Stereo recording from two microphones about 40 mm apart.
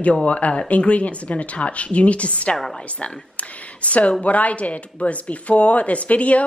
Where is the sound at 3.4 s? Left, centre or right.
Left.